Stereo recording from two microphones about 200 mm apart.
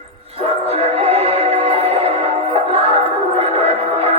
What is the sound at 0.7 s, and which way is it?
Music, 30° right (ahead or behind).